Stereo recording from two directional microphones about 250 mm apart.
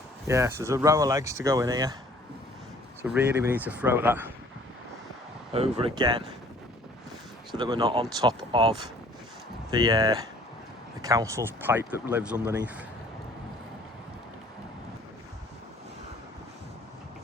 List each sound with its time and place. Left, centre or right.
0.3 s speech: centre
3.0 s speech: centre
5.5 s speech: right
7.5 s speech: centre